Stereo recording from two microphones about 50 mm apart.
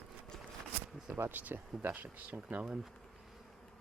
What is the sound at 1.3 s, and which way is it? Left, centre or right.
Speech, right.